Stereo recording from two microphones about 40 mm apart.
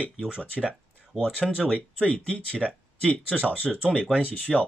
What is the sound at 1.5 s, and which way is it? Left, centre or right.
Speech, left.